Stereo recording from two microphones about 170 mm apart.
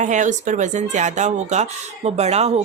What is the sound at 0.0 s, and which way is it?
Speech, 45° right (ahead or behind).